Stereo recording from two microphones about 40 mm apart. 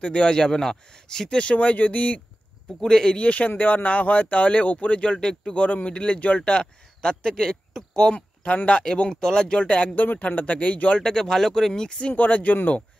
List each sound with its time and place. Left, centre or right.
0.0 s speech: left
1.4 s speech: left
2.8 s speech: centre
3.2 s speech: left; by 5.5 s centre
5.5 s speech: left; by 8.1 s centre
8.1 s speech: left; by 9.6 s centre
9.6 s speech: left
9.9 s speech: left
11.0 s speech: centre
12.1 s speech: left